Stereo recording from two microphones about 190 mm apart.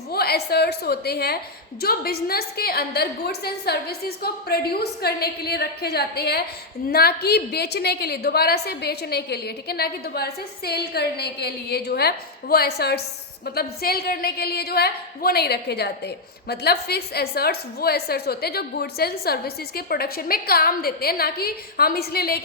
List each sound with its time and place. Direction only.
0.1 s a woman's voice: 55° left (ahead or behind)